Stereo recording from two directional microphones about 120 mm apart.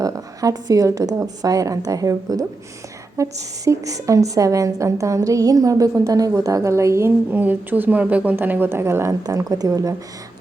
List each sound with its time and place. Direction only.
0.0 s a woman's voice: 30° right (ahead or behind)